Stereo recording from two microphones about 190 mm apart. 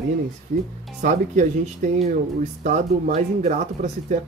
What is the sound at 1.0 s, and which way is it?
Speech, 40° right (ahead or behind).